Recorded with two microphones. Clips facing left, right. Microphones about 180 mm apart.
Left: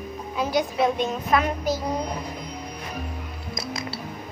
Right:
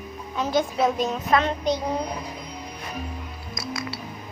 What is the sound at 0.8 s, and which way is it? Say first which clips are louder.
A child's voice: even; centre (ahead or behind).